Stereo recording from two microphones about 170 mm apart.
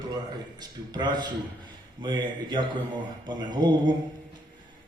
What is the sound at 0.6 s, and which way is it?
A man's voice, 25° right (ahead or behind).